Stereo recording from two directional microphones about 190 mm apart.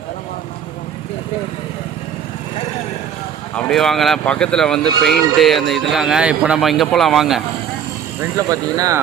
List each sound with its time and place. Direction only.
3.5 s speech: centre (ahead or behind)
8.2 s speech: 20° right (ahead or behind)